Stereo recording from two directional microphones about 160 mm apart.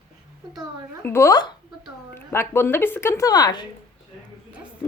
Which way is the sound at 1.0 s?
15° left (ahead or behind).